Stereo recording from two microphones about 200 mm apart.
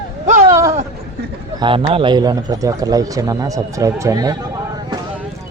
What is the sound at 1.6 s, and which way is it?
A man's voice, 25° right (ahead or behind).